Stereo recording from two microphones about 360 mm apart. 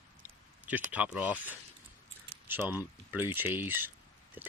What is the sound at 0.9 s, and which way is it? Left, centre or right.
Speech, centre.